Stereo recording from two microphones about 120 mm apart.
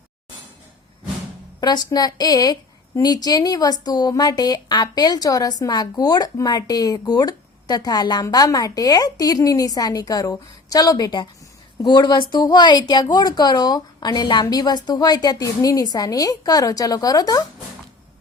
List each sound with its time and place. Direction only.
1.6 s a woman's voice: 35° left (ahead or behind)